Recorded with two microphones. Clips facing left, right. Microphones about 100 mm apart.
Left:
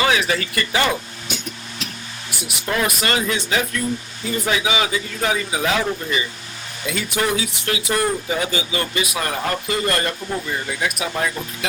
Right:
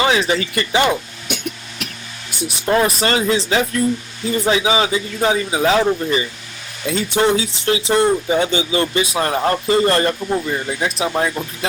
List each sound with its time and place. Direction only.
0.0 s speech: 25° right (ahead or behind)
1.3 s a sound: 60° right (ahead or behind)
2.4 s speech: 30° right (ahead or behind)